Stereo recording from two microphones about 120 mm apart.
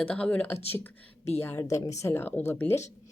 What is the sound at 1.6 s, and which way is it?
Speech, 30° left (ahead or behind).